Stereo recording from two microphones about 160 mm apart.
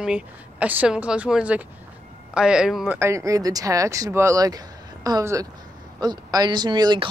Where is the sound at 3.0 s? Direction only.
20° right (ahead or behind).